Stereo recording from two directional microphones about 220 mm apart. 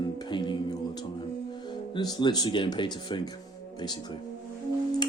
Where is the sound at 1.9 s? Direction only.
20° left (ahead or behind).